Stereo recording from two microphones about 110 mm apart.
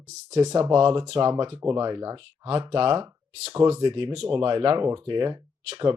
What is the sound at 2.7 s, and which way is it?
Speech, 50° right (ahead or behind).